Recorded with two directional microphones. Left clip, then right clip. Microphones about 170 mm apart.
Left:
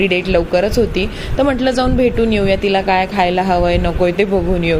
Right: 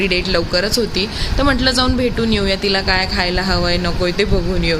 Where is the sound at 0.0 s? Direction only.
20° left (ahead or behind).